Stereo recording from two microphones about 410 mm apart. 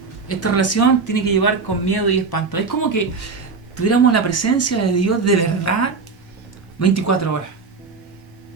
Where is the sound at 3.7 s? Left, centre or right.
Left.